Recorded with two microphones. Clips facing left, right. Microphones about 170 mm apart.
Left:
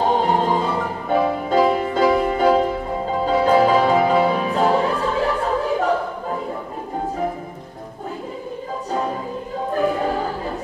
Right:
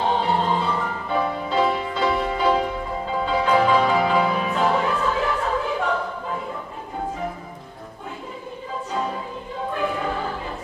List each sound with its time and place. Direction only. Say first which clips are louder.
0.0 s music: left 3 dB; 45° left (ahead or behind)
9.7 s music: left 5 dB; 40° left (ahead or behind)